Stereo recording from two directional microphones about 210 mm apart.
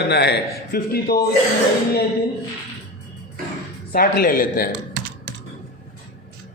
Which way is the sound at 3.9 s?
45° left (ahead or behind).